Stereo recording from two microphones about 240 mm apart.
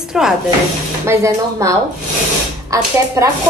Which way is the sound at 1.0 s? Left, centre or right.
Centre.